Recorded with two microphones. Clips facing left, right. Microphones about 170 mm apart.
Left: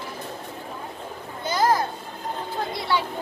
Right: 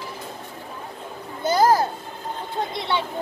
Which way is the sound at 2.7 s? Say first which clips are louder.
Left 1 dB; 25° right (ahead or behind).